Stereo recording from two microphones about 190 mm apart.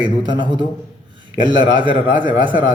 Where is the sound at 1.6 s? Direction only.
25° right (ahead or behind).